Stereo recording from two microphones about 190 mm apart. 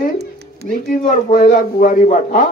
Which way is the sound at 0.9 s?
45° left (ahead or behind).